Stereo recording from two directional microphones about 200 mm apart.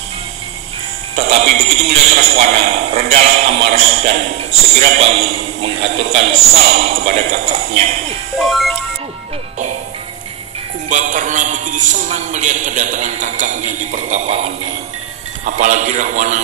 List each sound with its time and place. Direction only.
1.1 s a sound: 30° right (ahead or behind)
3.3 s a man's voice: 30° right (ahead or behind)
8.5 s speech: centre (ahead or behind)
10.9 s a man's voice: 40° right (ahead or behind)